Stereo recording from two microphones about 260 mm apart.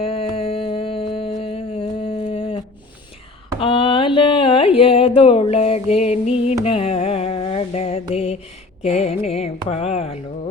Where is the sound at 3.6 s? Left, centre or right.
Left.